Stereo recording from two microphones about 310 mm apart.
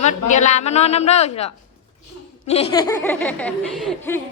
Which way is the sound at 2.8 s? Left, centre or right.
Centre.